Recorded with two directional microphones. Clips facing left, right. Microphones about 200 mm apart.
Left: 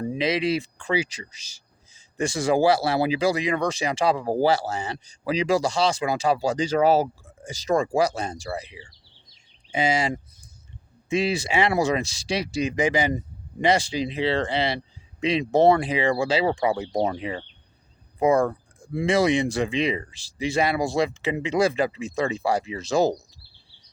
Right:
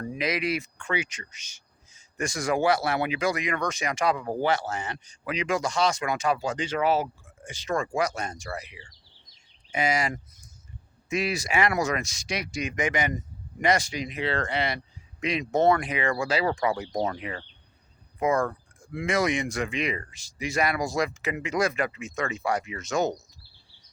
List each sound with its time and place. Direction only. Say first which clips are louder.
0.1 s speech: left 4 dB; 30° left (ahead or behind)